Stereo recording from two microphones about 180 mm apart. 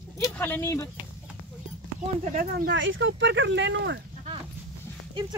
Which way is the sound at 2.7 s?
90° right.